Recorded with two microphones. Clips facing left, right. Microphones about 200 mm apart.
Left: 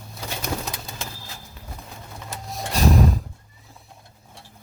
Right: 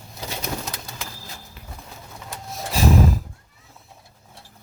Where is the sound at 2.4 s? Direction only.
Centre (ahead or behind).